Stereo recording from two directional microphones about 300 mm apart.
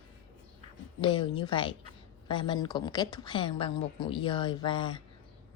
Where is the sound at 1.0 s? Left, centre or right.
Centre.